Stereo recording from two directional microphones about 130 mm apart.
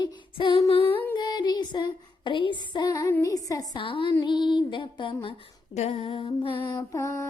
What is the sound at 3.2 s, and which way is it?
Speech, 25° left (ahead or behind).